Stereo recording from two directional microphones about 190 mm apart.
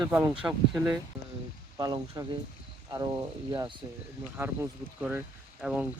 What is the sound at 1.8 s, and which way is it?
Speech, 20° right (ahead or behind).